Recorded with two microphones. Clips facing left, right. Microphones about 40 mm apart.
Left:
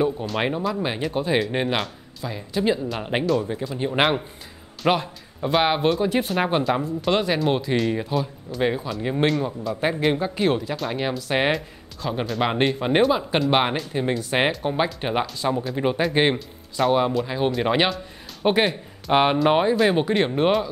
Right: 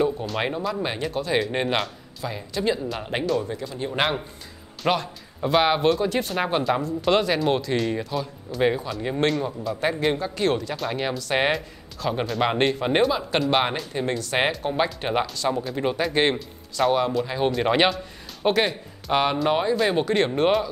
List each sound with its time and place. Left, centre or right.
0.0 s speech: centre
1.1 s speech: centre
1.4 s speech: centre
2.6 s speech: centre
10.4 s speech: centre
13.5 s speech: centre
16.8 s a man's voice: centre
19.1 s speech: centre
19.8 s speech: centre